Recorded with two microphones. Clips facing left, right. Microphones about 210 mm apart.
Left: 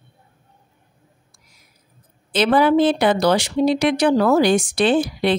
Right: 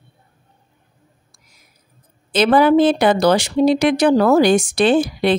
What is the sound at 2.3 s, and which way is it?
Speech, 45° right (ahead or behind).